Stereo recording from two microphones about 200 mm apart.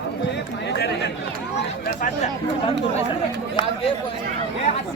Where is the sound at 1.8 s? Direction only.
45° left (ahead or behind).